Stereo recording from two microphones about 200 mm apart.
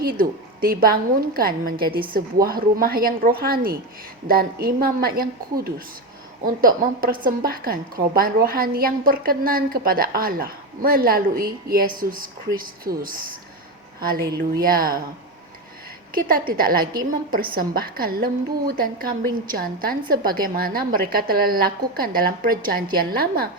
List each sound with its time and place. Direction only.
0.2 s a woman's voice: 45° right (ahead or behind)
16.1 s a woman's voice: 45° right (ahead or behind)